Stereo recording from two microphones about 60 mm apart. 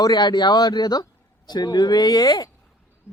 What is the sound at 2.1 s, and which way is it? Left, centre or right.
Speech, left.